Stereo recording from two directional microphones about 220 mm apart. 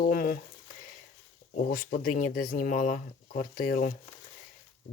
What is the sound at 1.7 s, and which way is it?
Speech, 35° left (ahead or behind).